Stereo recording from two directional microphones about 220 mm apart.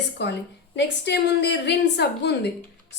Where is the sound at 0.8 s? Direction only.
50° left (ahead or behind).